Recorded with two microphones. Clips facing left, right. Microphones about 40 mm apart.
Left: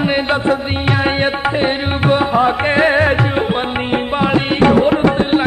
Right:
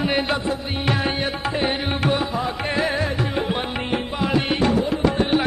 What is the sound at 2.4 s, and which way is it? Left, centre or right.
Music, left.